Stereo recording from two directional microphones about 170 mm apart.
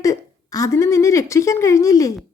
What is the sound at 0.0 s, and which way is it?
A woman's voice, 20° left (ahead or behind).